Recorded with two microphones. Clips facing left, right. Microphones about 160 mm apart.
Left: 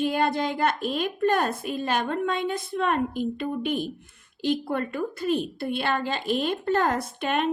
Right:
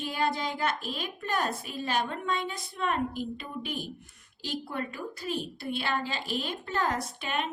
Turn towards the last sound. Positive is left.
turn(degrees=55)  # may be behind; listen again after turning